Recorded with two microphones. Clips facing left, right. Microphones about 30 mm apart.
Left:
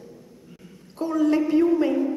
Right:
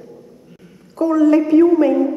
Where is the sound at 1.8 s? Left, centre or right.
Centre.